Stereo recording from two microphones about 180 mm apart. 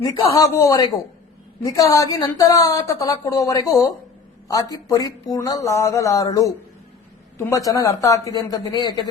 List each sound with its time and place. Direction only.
0.0 s a woman's voice: 20° left (ahead or behind)